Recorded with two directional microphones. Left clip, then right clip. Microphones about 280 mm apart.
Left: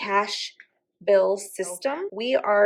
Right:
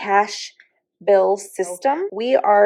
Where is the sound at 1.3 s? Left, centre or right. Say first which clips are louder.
Right 6 dB; right.